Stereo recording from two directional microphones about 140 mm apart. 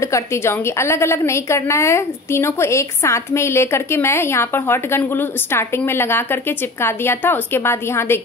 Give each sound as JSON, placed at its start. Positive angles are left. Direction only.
{"t": 0.0, "sound": "a woman's voice", "side_deg": 20}